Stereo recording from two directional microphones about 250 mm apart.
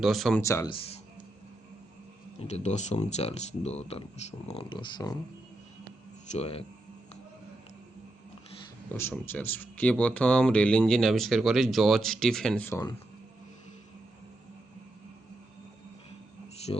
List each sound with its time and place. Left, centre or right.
0.0 s speech: centre
2.5 s speech: left
6.3 s speech: left
8.9 s speech: centre